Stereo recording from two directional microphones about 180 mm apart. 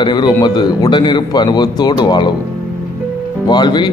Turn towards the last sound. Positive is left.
turn(degrees=25)  # may be behind; listen again after turning